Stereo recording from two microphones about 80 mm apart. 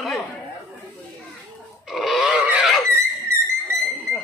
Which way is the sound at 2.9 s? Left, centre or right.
Right.